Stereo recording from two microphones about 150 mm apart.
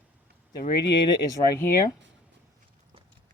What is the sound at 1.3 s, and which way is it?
Speech, 20° left (ahead or behind).